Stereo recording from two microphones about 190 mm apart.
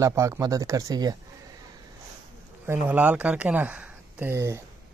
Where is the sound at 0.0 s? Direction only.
15° right (ahead or behind).